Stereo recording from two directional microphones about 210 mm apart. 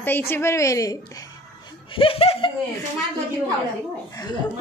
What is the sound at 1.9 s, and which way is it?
Speech, 25° left (ahead or behind).